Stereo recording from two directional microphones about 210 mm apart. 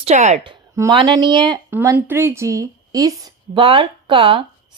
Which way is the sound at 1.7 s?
10° right (ahead or behind).